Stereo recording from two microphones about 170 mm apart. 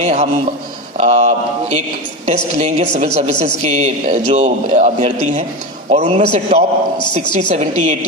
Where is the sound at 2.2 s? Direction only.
40° right (ahead or behind).